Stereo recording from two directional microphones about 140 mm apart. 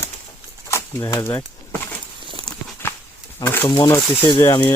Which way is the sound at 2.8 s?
15° left (ahead or behind).